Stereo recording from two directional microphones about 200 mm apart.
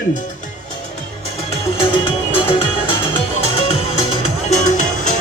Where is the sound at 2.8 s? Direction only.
25° left (ahead or behind).